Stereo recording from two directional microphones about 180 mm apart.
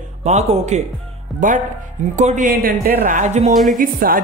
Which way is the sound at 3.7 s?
50° right (ahead or behind).